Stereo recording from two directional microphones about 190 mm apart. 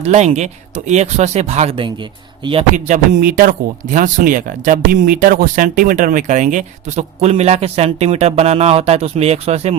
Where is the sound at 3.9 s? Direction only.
45° right (ahead or behind).